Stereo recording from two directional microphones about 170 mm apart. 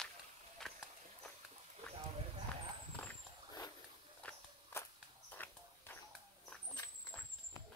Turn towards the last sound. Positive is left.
turn(degrees=10)  # may be behind; listen again after turning